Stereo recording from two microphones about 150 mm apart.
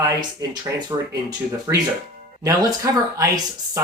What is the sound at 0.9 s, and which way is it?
Speech, 25° right (ahead or behind).